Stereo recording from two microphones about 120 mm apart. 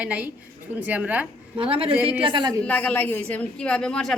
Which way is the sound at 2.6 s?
10° left (ahead or behind).